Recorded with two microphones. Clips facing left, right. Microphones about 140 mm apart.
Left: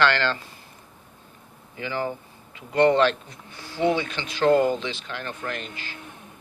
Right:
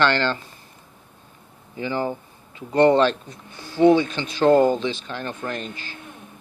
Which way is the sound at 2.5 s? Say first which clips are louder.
Right 3 dB; 35° right (ahead or behind).